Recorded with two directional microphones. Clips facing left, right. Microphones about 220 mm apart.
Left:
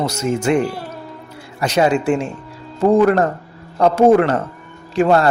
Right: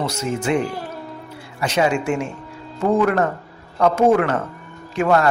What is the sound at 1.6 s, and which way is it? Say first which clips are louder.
A man's voice: left 3 dB; 40° left (ahead or behind).